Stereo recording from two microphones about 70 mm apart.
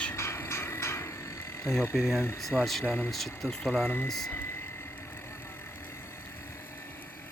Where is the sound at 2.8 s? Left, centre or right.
Left.